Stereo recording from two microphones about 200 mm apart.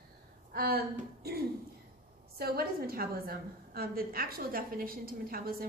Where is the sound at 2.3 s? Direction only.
50° right (ahead or behind).